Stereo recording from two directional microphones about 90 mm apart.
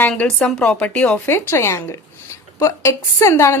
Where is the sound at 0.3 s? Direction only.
10° left (ahead or behind).